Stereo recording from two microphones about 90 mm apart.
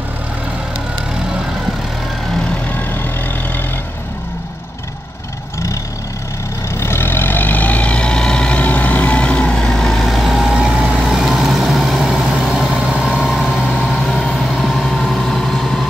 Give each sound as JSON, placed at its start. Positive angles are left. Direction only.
{"t": 2.7, "sound": "vehicle", "side_deg": 20}
{"t": 6.8, "sound": "vehicle", "side_deg": 25}
{"t": 13.7, "sound": "vehicle", "side_deg": 5}